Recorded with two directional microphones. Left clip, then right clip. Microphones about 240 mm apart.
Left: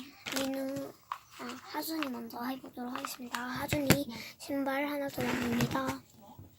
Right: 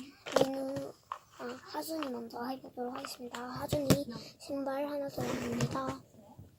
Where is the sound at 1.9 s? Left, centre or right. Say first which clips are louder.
Left 1 dB; left.